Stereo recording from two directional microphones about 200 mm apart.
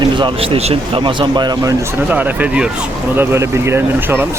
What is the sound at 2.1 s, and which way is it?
Speech, 10° right (ahead or behind).